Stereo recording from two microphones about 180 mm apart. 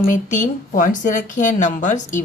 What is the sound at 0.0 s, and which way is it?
Speech, 45° left (ahead or behind).